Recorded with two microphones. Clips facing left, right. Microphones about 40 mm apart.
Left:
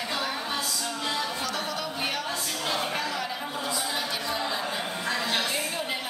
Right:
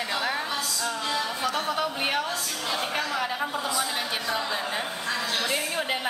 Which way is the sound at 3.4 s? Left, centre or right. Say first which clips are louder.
Right 3 dB; centre.